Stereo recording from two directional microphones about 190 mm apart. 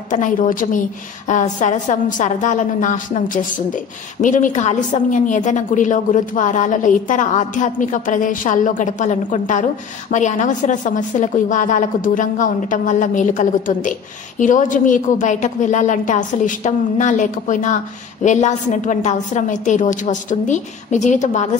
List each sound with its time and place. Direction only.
0.1 s a woman's voice: 45° left (ahead or behind)